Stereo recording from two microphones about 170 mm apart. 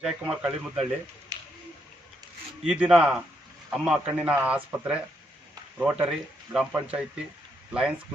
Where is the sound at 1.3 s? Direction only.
20° right (ahead or behind).